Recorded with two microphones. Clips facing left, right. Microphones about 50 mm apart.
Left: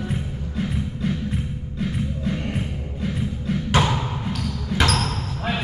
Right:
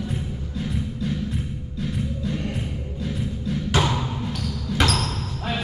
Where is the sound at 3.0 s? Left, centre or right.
Left.